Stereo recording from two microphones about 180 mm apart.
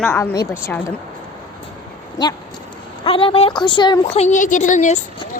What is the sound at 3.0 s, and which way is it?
A woman's voice, 30° left (ahead or behind).